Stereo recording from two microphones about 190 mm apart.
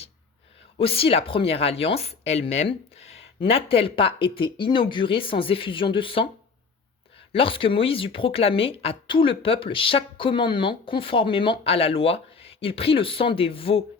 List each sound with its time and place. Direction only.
0.8 s speech: 30° left (ahead or behind)
7.3 s speech: 30° left (ahead or behind)